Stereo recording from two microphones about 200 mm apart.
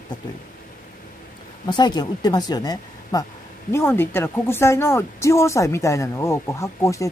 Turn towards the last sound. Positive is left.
turn(degrees=15)  # may be behind; listen again after turning